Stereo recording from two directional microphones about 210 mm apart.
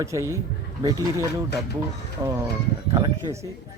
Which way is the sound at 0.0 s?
15° right (ahead or behind).